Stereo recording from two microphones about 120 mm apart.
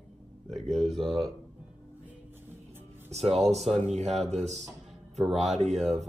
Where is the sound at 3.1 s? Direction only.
60° right (ahead or behind).